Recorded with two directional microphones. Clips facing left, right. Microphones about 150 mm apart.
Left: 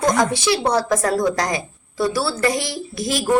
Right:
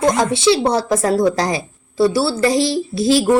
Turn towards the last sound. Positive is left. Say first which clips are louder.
# right 9 dB
turn(degrees=-30)  # may be behind; listen again after turning